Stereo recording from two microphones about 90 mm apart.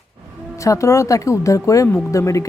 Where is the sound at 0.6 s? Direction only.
35° left (ahead or behind).